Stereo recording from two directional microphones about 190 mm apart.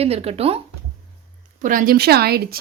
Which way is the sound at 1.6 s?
45° right (ahead or behind).